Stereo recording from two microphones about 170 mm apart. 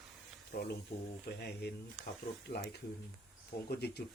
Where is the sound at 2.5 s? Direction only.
75° left (ahead or behind).